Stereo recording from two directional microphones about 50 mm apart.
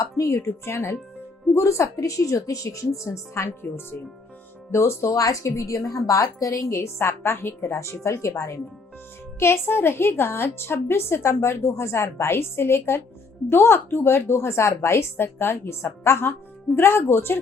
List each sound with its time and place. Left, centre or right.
0.2 s a woman's voice: left
1.5 s a woman's voice: left
4.7 s a woman's voice: left
9.4 s a woman's voice: left